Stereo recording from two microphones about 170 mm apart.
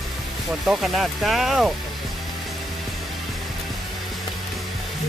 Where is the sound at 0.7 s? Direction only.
Centre (ahead or behind).